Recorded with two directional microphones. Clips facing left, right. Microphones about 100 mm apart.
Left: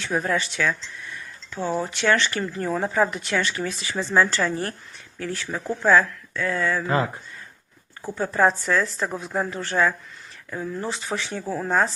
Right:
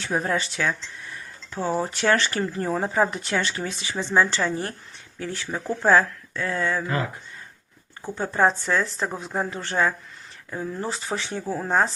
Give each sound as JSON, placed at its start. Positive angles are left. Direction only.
{"t": 0.0, "sound": "speech", "side_deg": -30}
{"t": 8.1, "sound": "speech", "side_deg": -25}
{"t": 9.0, "sound": "speech", "side_deg": 0}
{"t": 9.5, "sound": "speech", "side_deg": -30}